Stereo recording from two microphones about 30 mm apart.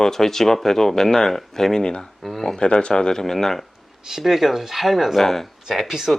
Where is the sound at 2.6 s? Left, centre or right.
Left; by 3.6 s centre.